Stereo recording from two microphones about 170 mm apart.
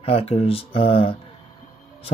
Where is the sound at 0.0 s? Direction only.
35° left (ahead or behind).